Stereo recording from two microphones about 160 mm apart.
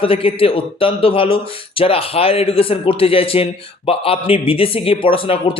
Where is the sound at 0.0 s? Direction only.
35° left (ahead or behind).